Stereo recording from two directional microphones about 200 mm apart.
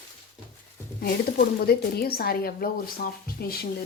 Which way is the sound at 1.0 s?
45° left (ahead or behind).